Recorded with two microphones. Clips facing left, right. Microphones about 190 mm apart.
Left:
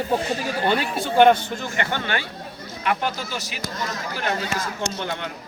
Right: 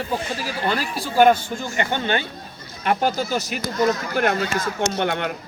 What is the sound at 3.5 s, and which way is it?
Speech, 60° right (ahead or behind).